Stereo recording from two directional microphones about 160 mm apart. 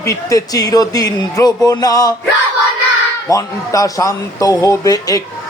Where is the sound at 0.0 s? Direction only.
20° left (ahead or behind).